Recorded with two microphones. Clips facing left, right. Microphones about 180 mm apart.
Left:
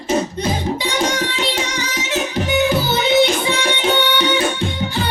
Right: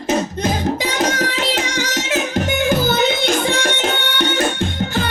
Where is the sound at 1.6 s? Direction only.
90° right.